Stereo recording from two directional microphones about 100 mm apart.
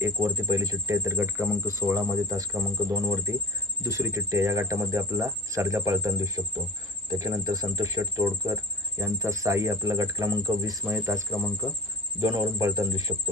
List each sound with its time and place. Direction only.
0.0 s speech: 30° right (ahead or behind)
10.8 s speech: 25° right (ahead or behind)